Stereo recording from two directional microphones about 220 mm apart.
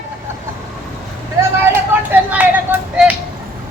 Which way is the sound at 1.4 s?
10° right (ahead or behind).